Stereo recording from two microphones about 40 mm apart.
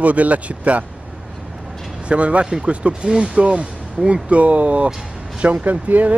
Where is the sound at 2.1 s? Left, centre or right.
Right.